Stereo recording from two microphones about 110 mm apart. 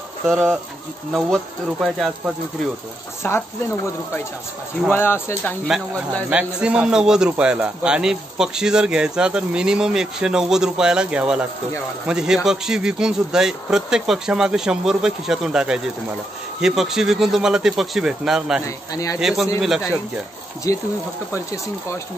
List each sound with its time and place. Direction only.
0.3 s a man's voice: centre (ahead or behind)
3.2 s speech: 25° left (ahead or behind)
4.8 s speech: 20° left (ahead or behind)
6.3 s a man's voice: 10° right (ahead or behind)
18.9 s speech: 30° left (ahead or behind)
19.1 s a man's voice: 5° right (ahead or behind)
20.7 s speech: 25° left (ahead or behind)